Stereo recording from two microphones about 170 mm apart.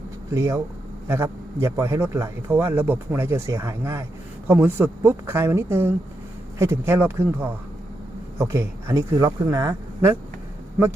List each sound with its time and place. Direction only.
0.3 s a man's voice: 15° right (ahead or behind)